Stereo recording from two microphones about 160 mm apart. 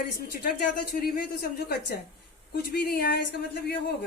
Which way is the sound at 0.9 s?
70° left (ahead or behind).